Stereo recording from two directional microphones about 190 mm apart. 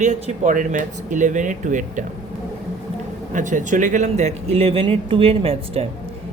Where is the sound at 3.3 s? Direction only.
40° right (ahead or behind).